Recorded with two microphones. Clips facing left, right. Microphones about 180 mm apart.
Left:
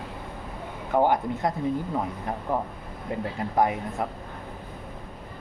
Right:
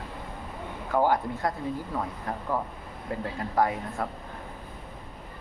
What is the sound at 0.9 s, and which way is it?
Speech, 20° left (ahead or behind).